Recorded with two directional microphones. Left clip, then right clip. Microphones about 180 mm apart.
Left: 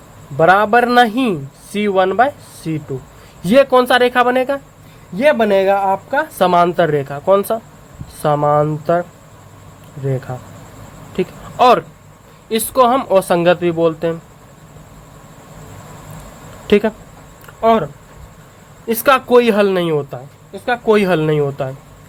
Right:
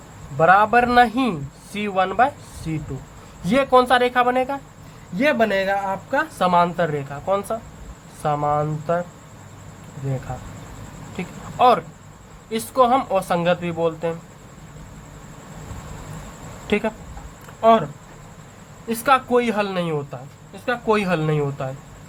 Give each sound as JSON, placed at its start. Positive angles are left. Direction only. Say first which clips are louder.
{"t": 0.3, "sound": "speech", "louder": "left 4 dB", "side_deg": 35}
{"t": 10.3, "sound": "speech", "louder": "left 4 dB", "side_deg": 25}
{"t": 16.6, "sound": "speech", "louder": "left 9 dB", "side_deg": 35}
{"t": 18.9, "sound": "speech", "louder": "left 6 dB", "side_deg": 45}